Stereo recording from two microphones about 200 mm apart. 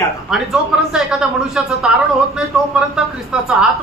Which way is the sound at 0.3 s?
Centre (ahead or behind).